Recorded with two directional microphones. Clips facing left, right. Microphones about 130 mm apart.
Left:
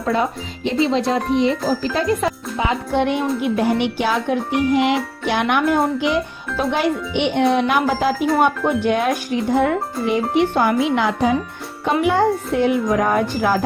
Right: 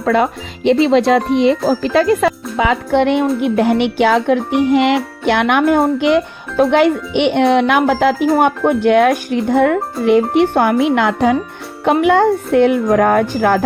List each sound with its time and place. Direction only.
0.0 s speech: 75° right (ahead or behind)
3.4 s music: 60° right (ahead or behind)